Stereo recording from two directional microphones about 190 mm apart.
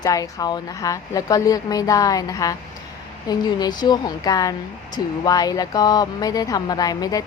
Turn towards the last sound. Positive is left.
turn(degrees=20)  # may be behind; listen again after turning